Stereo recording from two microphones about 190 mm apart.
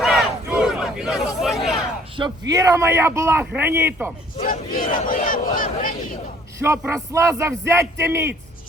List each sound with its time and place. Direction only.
0.0 s battle cry: 5° right (ahead or behind)
2.5 s a man's voice: 15° right (ahead or behind)
4.4 s speech: 45° left (ahead or behind)
6.6 s a man's voice: 15° right (ahead or behind)